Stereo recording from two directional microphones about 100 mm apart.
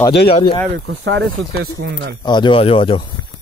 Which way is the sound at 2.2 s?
50° left (ahead or behind).